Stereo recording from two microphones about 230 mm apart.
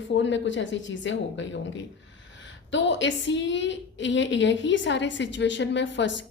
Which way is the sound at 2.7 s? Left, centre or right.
Left.